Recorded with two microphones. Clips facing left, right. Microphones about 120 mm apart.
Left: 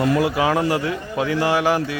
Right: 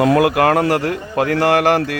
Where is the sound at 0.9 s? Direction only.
65° right (ahead or behind); by 2.0 s 85° right.